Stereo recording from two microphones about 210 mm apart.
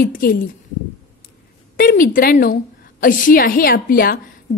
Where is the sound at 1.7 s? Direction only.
40° left (ahead or behind).